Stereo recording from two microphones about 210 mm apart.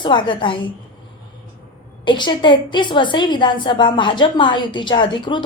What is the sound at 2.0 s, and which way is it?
A woman's voice, 20° left (ahead or behind).